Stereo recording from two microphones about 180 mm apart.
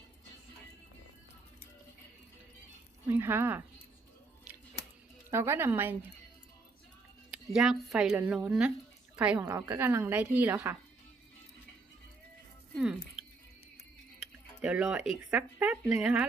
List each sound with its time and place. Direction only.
3.1 s a woman's voice: 10° right (ahead or behind)
5.3 s a woman's voice: 15° right (ahead or behind)
7.5 s a woman's voice: 5° right (ahead or behind)
9.4 s a woman's voice: 25° right (ahead or behind)
9.6 s a woman's voice: 10° right (ahead or behind)
12.7 s speech: 5° right (ahead or behind)
13.2 s drip: centre (ahead or behind)
14.6 s speech: 5° right (ahead or behind)